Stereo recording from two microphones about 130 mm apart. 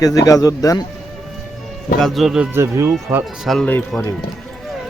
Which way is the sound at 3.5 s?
Centre (ahead or behind).